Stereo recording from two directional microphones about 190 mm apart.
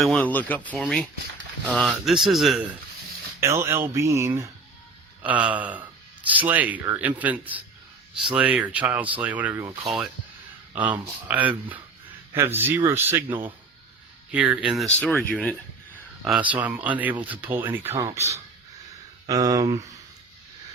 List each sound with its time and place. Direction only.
0.0 s speech: 5° left (ahead or behind)
3.4 s speech: 15° right (ahead or behind); by 15.5 s 10° left (ahead or behind)
16.2 s speech: 5° right (ahead or behind)
19.3 s speech: 20° right (ahead or behind)